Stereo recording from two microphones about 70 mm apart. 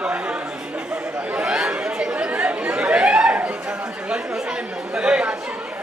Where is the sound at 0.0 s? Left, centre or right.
Centre.